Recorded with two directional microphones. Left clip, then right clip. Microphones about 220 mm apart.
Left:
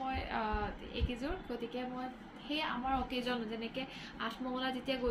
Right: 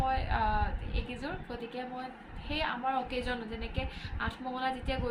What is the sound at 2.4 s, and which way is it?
A woman's voice, 10° right (ahead or behind).